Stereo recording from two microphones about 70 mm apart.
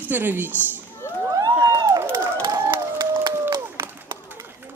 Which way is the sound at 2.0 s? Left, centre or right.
Right.